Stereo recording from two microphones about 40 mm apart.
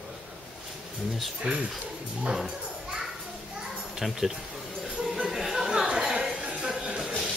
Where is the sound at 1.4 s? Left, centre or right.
Right.